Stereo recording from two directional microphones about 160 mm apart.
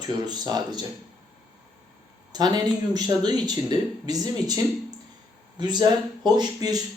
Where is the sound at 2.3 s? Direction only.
25° right (ahead or behind).